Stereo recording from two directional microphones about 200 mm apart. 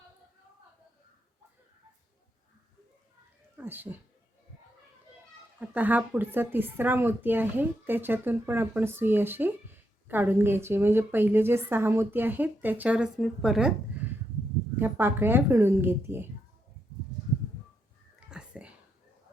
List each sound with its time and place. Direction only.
3.6 s a woman's voice: 10° right (ahead or behind)
5.5 s a woman's voice: 10° right (ahead or behind)
18.3 s a sound: 5° right (ahead or behind)